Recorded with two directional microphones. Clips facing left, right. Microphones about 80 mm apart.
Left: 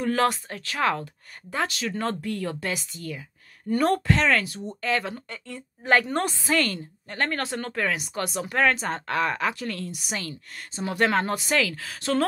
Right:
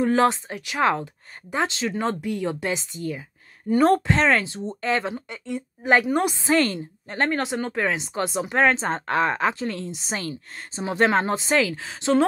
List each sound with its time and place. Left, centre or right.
0.0 s speech: right
6.3 s speech: right